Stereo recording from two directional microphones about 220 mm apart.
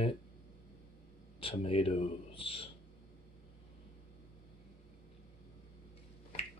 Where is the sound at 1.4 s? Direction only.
25° left (ahead or behind).